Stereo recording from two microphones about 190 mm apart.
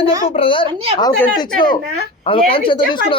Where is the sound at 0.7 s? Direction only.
30° right (ahead or behind).